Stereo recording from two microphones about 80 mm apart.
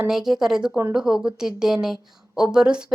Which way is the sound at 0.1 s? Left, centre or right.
Centre.